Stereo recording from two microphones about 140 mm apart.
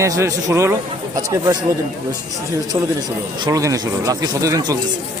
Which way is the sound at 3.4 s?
25° right (ahead or behind).